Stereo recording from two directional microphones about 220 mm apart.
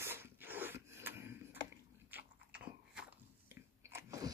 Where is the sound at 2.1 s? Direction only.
5° right (ahead or behind).